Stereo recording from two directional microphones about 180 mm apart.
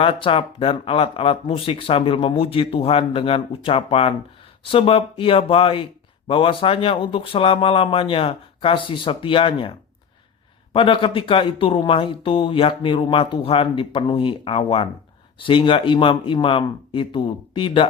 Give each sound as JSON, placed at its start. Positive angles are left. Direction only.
{"t": 0.0, "sound": "speech", "side_deg": 30}